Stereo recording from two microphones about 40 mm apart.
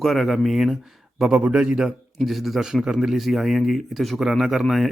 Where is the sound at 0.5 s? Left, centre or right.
Centre.